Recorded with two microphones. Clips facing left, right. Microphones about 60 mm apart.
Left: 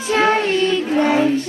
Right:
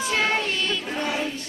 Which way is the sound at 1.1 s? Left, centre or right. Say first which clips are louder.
Left 11 dB; left.